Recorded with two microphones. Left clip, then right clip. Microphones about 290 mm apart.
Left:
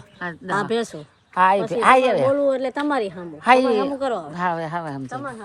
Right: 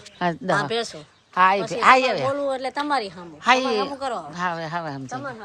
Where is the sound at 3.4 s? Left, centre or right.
Centre.